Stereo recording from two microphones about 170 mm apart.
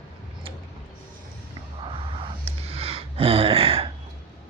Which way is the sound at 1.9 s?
35° right (ahead or behind).